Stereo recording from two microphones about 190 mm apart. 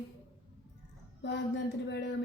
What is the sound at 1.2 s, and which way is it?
Speech, 65° left (ahead or behind).